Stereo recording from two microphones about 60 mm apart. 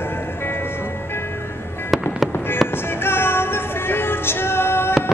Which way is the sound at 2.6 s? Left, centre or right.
Left.